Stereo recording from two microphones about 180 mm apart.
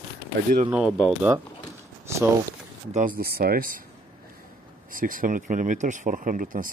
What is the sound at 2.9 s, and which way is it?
Speech, 45° right (ahead or behind).